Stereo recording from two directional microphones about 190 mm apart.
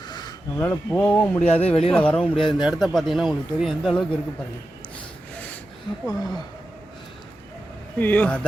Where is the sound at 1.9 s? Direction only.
5° left (ahead or behind).